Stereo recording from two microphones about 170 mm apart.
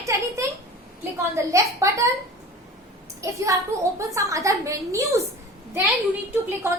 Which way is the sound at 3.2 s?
20° right (ahead or behind).